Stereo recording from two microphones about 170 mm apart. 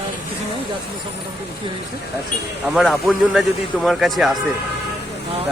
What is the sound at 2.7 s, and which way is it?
Speech, centre (ahead or behind).